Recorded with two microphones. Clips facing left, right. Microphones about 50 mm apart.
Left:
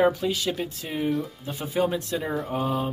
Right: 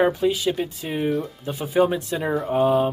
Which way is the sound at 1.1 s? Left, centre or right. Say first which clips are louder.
Right 3 dB; centre.